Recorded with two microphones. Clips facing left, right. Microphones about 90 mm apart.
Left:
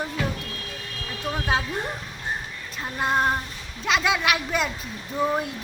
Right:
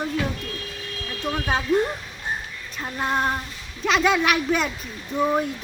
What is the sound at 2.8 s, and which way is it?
Speech, 5° left (ahead or behind).